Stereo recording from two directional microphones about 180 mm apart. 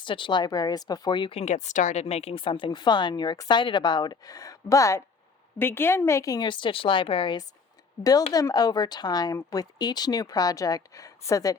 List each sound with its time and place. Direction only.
0.0 s speech: 25° left (ahead or behind)